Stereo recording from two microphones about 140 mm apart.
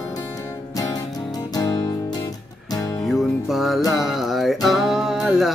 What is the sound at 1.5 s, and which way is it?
Music, 30° left (ahead or behind).